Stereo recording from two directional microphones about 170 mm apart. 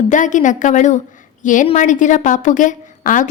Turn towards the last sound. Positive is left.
turn(degrees=50)  # may be behind; listen again after turning